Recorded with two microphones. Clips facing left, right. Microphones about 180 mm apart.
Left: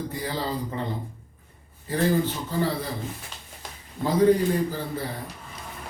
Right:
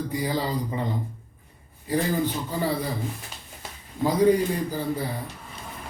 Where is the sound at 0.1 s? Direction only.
15° right (ahead or behind).